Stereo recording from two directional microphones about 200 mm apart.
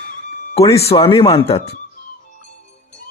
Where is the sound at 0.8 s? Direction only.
30° left (ahead or behind).